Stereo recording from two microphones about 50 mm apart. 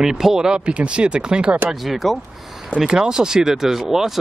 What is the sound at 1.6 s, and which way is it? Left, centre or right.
Speech, centre.